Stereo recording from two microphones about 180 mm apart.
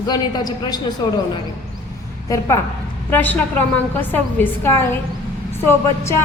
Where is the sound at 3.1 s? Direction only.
10° left (ahead or behind).